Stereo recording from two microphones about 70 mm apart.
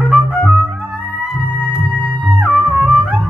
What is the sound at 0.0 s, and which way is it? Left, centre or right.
Music, centre.